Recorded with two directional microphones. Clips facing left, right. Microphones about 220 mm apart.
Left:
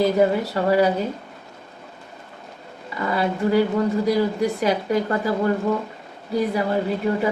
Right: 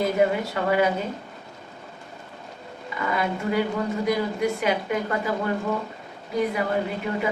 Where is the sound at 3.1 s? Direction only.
35° left (ahead or behind).